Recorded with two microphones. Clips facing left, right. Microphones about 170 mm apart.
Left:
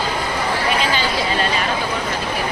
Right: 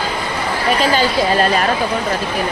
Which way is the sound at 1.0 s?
45° right (ahead or behind).